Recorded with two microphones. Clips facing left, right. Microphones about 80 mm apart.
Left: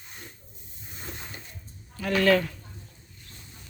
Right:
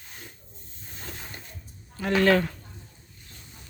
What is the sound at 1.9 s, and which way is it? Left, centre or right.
Speech, right.